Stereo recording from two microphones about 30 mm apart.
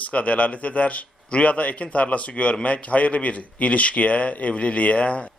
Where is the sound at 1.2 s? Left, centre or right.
Left.